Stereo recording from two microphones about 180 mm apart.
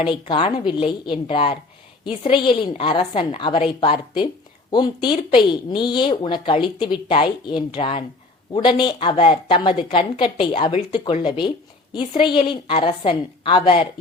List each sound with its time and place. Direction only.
0.0 s speech: 25° left (ahead or behind)